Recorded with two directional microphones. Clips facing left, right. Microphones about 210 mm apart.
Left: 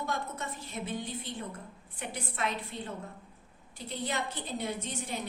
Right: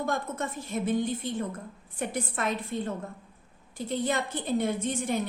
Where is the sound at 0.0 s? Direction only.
50° right (ahead or behind).